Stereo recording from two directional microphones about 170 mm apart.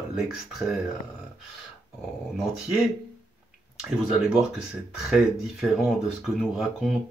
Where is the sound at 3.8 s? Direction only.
5° right (ahead or behind).